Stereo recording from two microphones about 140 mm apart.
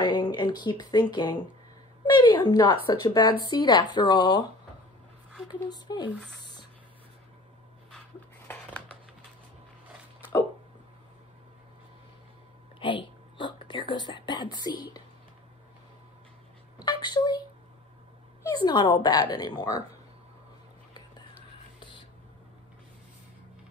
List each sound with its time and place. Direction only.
0.0 s speech: 30° left (ahead or behind)
5.5 s speech: 30° left (ahead or behind)
8.5 s a sound: 10° left (ahead or behind)
12.7 s whispering: 35° left (ahead or behind)
16.7 s a sound: 30° left (ahead or behind)
18.4 s speech: 30° left (ahead or behind)
21.7 s whispering: 35° left (ahead or behind)